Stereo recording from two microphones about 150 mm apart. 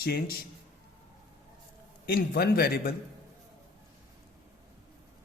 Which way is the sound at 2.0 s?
90° left.